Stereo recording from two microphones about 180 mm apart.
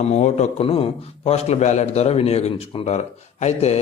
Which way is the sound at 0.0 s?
40° left (ahead or behind).